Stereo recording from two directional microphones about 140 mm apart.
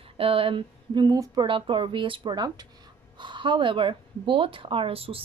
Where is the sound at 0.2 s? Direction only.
40° right (ahead or behind).